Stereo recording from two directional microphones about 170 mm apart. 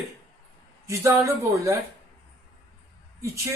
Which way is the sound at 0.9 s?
15° right (ahead or behind).